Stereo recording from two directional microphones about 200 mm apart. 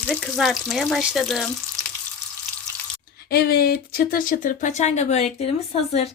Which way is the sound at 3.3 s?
50° left (ahead or behind).